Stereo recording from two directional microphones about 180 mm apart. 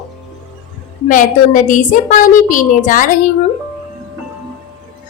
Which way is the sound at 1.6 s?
45° left (ahead or behind).